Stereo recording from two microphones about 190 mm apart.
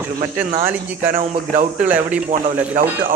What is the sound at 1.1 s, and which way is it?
Speech, 40° right (ahead or behind).